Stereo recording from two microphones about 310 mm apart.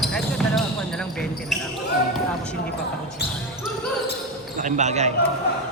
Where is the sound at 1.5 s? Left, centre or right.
Centre.